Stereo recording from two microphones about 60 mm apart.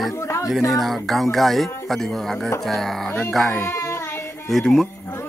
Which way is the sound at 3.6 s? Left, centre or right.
Left.